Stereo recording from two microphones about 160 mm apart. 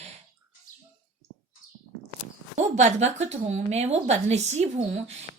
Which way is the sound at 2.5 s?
45° right (ahead or behind).